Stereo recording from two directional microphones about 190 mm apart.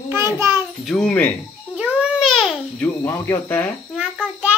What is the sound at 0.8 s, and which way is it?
Speech, 5° left (ahead or behind).